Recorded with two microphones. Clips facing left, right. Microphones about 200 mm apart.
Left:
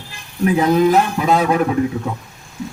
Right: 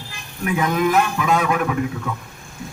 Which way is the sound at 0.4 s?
30° left (ahead or behind).